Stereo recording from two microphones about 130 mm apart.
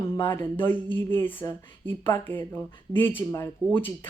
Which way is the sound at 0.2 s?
15° left (ahead or behind).